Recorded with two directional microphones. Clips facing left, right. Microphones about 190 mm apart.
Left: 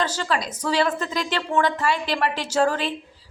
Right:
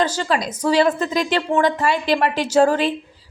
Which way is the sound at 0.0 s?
15° right (ahead or behind).